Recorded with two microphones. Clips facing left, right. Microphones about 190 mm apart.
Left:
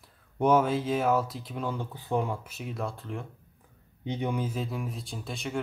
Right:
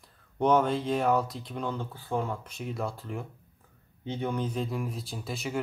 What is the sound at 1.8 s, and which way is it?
Speech, 20° left (ahead or behind).